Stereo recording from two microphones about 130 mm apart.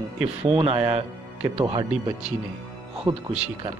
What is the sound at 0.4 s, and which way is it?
A man's voice, 50° right (ahead or behind).